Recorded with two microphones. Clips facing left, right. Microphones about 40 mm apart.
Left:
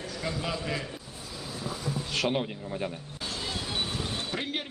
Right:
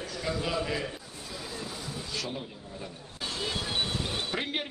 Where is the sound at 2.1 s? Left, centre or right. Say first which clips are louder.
Left 10 dB; left.